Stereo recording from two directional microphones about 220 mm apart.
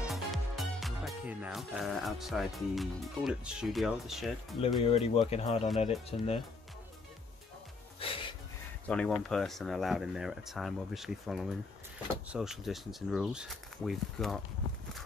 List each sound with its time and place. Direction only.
0.1 s speech: centre (ahead or behind)
4.8 s speech: 25° left (ahead or behind)
8.0 s a sound: 25° left (ahead or behind)
8.8 s speech: 5° left (ahead or behind)